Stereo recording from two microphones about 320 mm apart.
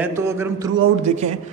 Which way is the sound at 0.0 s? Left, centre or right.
Centre.